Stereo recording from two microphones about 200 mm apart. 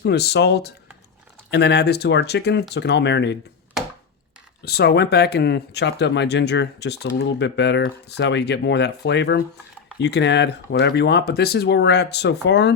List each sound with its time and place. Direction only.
0.0 s speech: 55° left (ahead or behind)
3.8 s chopping: centre (ahead or behind)
4.6 s speech: 55° left (ahead or behind)